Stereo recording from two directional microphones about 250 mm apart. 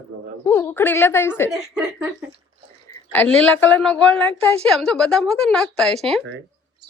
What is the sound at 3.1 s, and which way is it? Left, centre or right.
A woman's voice, centre.